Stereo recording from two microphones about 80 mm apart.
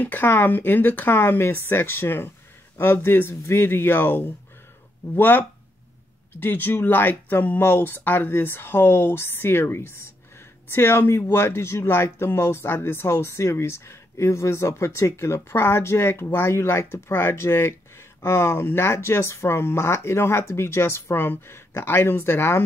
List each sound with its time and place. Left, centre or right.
0.0 s speech: left
6.4 s speech: left